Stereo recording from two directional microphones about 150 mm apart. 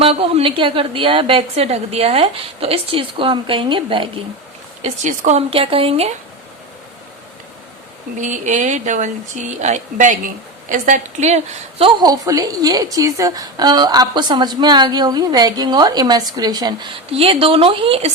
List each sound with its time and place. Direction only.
0.0 s a woman's voice: 40° right (ahead or behind)
4.8 s a woman's voice: 50° right (ahead or behind)
8.2 s speech: 55° right (ahead or behind)
11.9 s a woman's voice: 25° right (ahead or behind)
17.1 s a woman's voice: 40° right (ahead or behind)